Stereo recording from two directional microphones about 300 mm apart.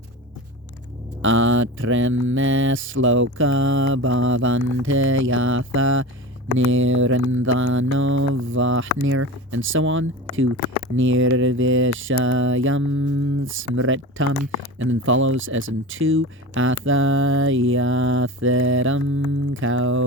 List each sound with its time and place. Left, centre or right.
1.2 s speech: right